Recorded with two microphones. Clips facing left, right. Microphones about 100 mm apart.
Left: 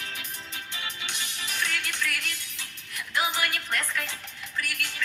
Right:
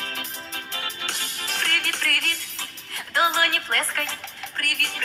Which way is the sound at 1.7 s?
75° right (ahead or behind).